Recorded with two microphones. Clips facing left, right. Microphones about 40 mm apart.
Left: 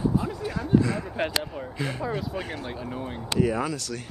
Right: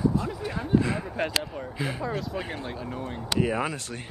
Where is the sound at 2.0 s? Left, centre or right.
Centre.